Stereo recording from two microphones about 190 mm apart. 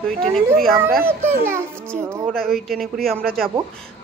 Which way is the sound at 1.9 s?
5° left (ahead or behind).